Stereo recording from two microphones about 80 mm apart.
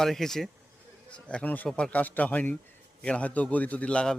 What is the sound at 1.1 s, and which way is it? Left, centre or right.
A man's voice, centre.